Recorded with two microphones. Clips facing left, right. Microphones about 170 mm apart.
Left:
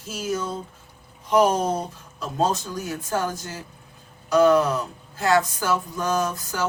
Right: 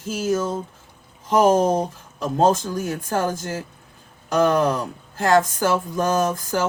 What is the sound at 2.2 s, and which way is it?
Speech, 50° right (ahead or behind).